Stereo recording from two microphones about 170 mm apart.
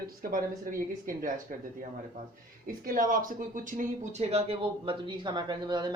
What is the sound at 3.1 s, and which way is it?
Speech, 50° right (ahead or behind).